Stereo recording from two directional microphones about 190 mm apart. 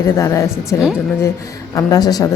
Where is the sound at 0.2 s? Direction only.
15° left (ahead or behind).